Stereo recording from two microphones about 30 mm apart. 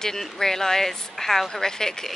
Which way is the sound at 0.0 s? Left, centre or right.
Centre.